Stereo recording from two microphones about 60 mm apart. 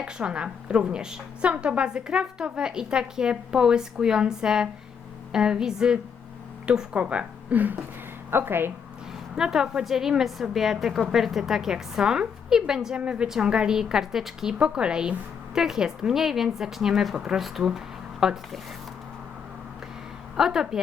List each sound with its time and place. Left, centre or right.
0.0 s a woman's voice: centre
8.3 s speech: right
9.3 s a woman's voice: centre
20.3 s a woman's voice: centre